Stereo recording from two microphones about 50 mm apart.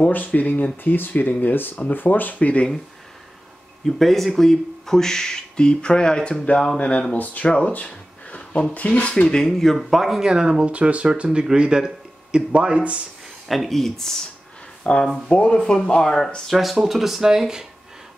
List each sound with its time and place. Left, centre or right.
0.1 s speech: left
3.8 s speech: centre; by 7.5 s left
7.7 s a sound: left
8.7 s speech: left
9.3 s speech: centre
10.7 s speech: right
13.5 s speech: centre
14.8 s speech: centre
15.6 s speech: centre
16.3 s speech: centre